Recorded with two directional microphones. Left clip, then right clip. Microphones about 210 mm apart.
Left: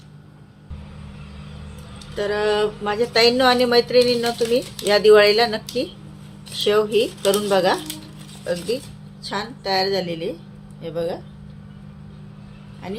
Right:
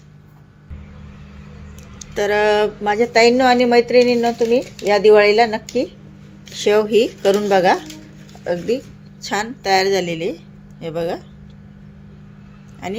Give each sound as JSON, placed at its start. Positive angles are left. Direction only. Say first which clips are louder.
{"t": 2.0, "sound": "speech", "louder": "right 6 dB", "side_deg": -40}